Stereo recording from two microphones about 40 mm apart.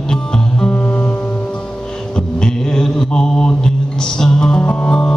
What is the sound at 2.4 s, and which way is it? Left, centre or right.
Music, centre.